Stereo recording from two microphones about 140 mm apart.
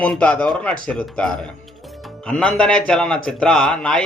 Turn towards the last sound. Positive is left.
turn(degrees=5)  # may be behind; listen again after turning